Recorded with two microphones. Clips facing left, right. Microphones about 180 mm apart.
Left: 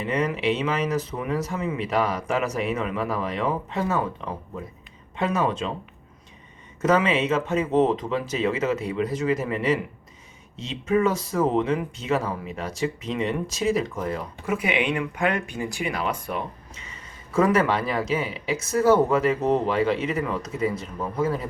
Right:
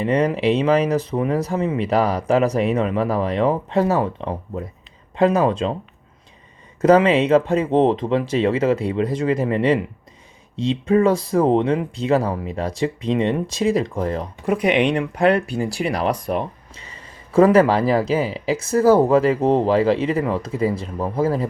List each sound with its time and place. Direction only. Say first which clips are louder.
0.0 s speech: right 6 dB; 35° right (ahead or behind)
6.8 s speech: right 7 dB; 35° right (ahead or behind)